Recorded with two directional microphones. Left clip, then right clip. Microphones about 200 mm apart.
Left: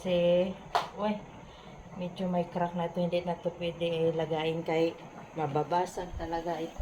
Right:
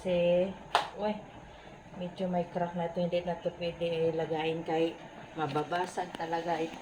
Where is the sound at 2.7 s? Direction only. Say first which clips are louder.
Left 1 dB; 5° left (ahead or behind).